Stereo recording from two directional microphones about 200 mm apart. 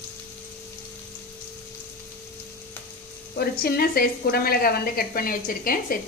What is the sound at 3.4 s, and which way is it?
Speech, 50° left (ahead or behind).